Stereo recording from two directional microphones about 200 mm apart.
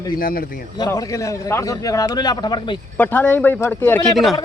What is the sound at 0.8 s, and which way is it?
A man's voice, 15° left (ahead or behind).